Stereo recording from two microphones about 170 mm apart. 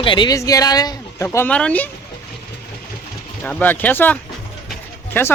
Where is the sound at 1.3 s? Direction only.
10° left (ahead or behind).